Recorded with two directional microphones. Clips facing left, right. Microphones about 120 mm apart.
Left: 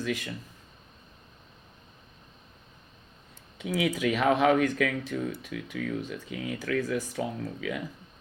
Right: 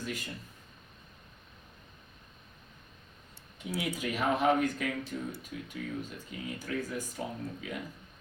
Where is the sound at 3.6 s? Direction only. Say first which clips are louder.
Left 7 dB; 90° left.